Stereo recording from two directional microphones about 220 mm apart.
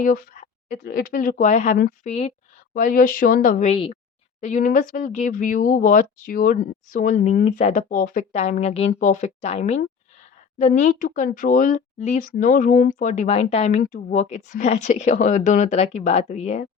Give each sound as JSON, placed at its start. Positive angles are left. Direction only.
{"t": 0.0, "sound": "speech", "side_deg": 40}